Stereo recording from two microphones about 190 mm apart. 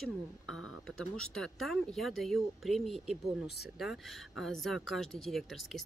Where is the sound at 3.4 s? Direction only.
60° left (ahead or behind).